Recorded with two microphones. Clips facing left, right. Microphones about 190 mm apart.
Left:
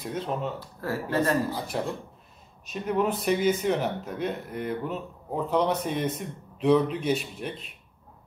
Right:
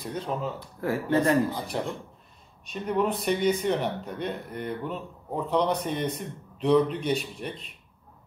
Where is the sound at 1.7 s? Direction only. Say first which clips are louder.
Left 1 dB; 5° left (ahead or behind).